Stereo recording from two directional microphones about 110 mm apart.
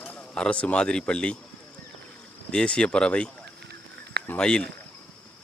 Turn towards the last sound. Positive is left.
turn(degrees=10)  # may be behind; listen again after turning